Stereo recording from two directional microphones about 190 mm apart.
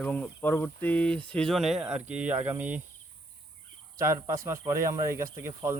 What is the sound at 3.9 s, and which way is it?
Speech, 15° right (ahead or behind).